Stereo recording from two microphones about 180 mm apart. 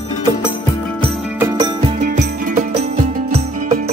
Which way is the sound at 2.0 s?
55° right (ahead or behind).